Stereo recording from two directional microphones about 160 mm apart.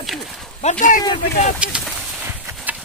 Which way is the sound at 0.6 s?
55° left (ahead or behind).